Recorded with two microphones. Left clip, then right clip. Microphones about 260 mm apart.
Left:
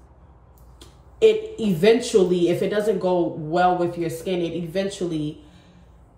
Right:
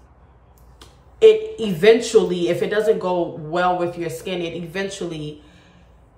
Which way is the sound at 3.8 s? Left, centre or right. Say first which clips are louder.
Even; centre.